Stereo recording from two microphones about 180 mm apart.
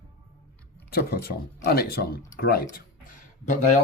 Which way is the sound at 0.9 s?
60° left (ahead or behind).